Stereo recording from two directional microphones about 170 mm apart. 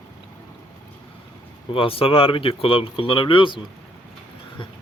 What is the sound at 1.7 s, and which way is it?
Speech, 35° left (ahead or behind).